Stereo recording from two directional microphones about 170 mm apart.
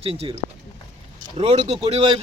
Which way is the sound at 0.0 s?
35° right (ahead or behind).